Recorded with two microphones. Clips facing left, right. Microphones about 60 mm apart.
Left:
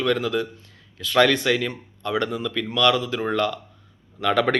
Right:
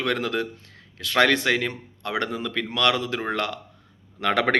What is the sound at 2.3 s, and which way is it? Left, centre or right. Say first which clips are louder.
Speech: left 2 dB; right.